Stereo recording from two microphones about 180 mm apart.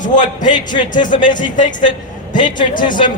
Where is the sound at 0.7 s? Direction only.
25° left (ahead or behind).